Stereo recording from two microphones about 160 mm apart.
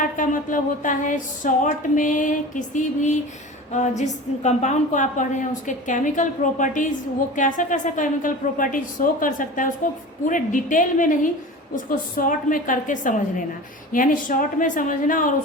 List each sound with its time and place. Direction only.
0.0 s music: 55° left (ahead or behind)
7.3 s a woman's voice: 50° left (ahead or behind)